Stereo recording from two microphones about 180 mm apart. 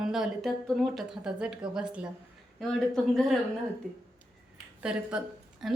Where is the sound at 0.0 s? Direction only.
Centre (ahead or behind).